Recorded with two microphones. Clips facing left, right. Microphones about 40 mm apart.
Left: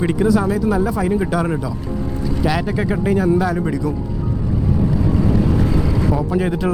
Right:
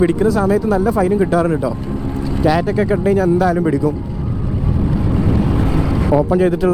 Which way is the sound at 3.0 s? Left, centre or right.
Centre.